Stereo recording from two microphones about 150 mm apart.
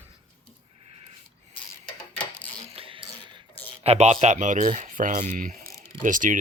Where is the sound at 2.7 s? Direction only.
40° right (ahead or behind).